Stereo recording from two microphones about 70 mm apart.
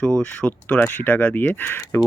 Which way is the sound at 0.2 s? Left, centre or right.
Centre.